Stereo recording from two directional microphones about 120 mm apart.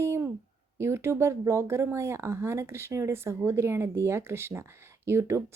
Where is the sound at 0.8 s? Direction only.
20° right (ahead or behind).